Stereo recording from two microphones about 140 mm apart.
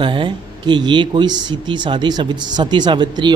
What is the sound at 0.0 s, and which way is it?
Speech, 35° right (ahead or behind).